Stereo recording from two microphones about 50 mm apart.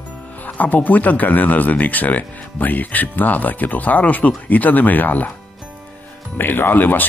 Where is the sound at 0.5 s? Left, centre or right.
Left.